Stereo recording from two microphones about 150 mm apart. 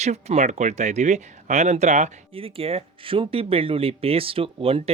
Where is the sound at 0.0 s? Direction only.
50° right (ahead or behind).